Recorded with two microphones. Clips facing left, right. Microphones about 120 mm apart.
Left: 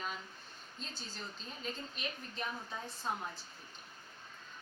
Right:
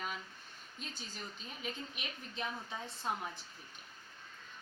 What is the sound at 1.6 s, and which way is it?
Speech, 15° right (ahead or behind).